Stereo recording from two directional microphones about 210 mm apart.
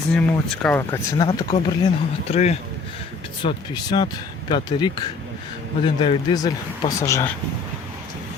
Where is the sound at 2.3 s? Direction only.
30° left (ahead or behind).